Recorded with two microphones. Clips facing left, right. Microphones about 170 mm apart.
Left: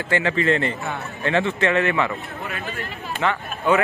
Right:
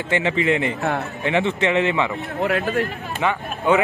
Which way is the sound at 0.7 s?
70° right (ahead or behind).